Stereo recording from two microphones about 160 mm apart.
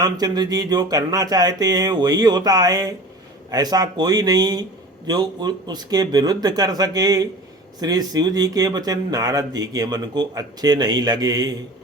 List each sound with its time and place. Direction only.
0.0 s speech: 25° right (ahead or behind)